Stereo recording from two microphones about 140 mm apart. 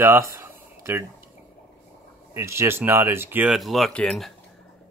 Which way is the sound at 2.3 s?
20° right (ahead or behind).